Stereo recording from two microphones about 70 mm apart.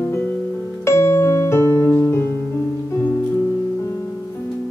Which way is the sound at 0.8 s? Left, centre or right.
Left.